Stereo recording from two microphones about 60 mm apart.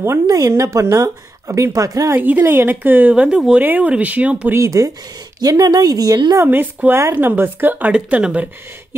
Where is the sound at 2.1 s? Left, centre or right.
Right.